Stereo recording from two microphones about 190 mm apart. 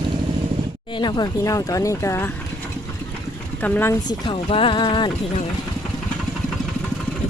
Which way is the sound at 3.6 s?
10° left (ahead or behind).